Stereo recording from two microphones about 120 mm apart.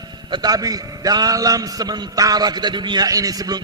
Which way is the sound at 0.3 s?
35° right (ahead or behind).